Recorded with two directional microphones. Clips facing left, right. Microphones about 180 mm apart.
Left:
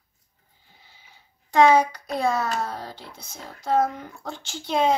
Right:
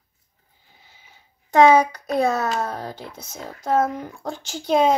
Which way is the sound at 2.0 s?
50° right (ahead or behind).